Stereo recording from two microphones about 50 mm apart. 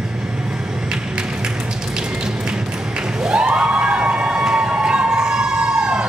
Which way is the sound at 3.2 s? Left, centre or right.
Centre.